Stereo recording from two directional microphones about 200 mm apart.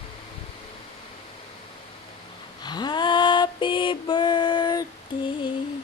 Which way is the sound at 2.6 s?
20° left (ahead or behind).